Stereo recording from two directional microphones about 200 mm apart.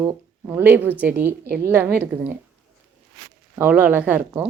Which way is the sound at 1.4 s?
55° right (ahead or behind).